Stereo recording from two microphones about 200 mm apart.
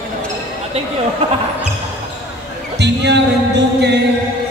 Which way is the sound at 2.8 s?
60° right (ahead or behind).